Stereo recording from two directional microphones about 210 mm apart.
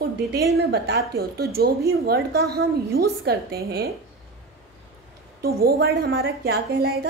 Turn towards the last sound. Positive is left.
turn(degrees=-50)  # may be behind; listen again after turning